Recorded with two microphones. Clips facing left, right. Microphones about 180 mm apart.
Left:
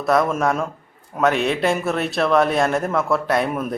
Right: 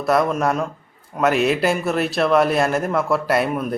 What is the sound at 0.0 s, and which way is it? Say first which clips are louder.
Speech: even; centre (ahead or behind).